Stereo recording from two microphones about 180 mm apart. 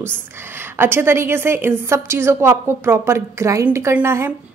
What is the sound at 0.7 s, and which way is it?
A woman's voice, 15° right (ahead or behind).